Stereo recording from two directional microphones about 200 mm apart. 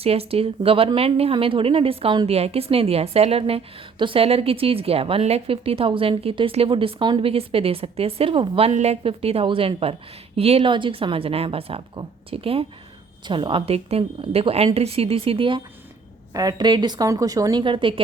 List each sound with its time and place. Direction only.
0.0 s a woman's voice: 30° right (ahead or behind)